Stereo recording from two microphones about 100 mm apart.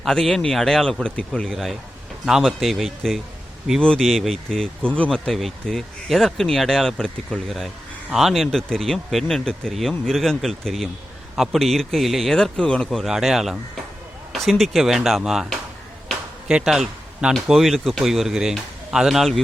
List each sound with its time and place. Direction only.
0.0 s speech: 5° left (ahead or behind)
16.0 s a sound: 5° right (ahead or behind)
17.3 s speech: centre (ahead or behind)